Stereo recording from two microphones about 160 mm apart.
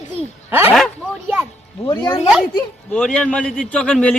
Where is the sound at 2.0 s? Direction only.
30° left (ahead or behind).